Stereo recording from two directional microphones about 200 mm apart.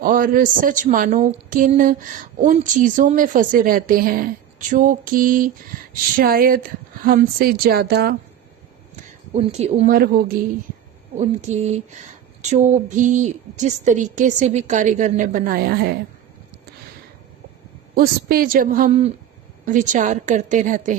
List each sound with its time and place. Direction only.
0.0 s a woman's voice: 45° right (ahead or behind)
9.0 s speech: 35° right (ahead or behind)
9.9 s a woman's voice: 50° right (ahead or behind)
11.2 s speech: 35° right (ahead or behind); by 16.0 s 50° right (ahead or behind)
17.9 s a woman's voice: 45° right (ahead or behind)